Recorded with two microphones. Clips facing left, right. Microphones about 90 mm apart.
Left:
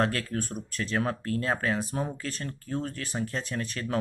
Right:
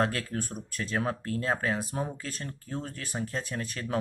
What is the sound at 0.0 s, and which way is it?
Speech, 15° right (ahead or behind).